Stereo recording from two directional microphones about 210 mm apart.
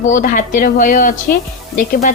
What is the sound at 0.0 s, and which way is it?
Speech, 35° left (ahead or behind).